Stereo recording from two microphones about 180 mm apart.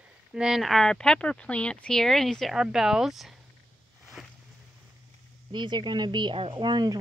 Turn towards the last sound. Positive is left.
turn(degrees=-25)  # may be behind; listen again after turning